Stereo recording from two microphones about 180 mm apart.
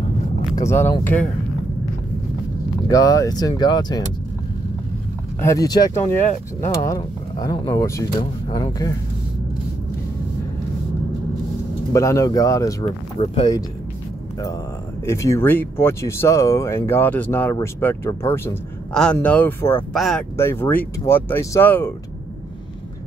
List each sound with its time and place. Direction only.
0.6 s speech: 15° left (ahead or behind)
2.9 s speech: 20° left (ahead or behind)
5.4 s speech: 20° left (ahead or behind)
11.9 s speech: 15° left (ahead or behind)
12.8 s speech: 35° left (ahead or behind)
15.0 s speech: 15° left (ahead or behind)
20.3 s speech: 15° left (ahead or behind)